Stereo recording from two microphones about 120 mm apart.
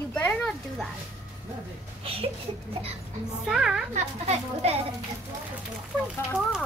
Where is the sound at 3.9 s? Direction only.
60° right (ahead or behind).